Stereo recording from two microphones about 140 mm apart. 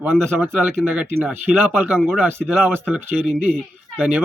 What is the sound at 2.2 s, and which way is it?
Speech, 15° right (ahead or behind).